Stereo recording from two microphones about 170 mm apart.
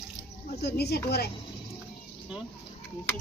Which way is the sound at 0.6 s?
70° left (ahead or behind).